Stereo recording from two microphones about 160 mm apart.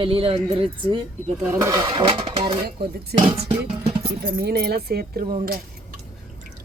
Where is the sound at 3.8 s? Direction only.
35° right (ahead or behind).